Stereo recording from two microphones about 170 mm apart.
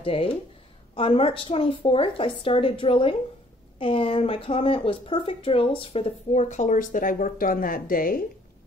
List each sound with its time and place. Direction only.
0.0 s speech: 30° left (ahead or behind); by 8.2 s 55° left (ahead or behind)